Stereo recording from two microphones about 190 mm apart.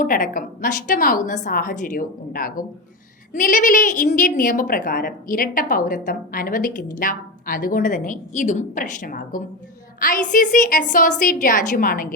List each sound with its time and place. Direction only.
0.0 s a woman's voice: 45° left (ahead or behind)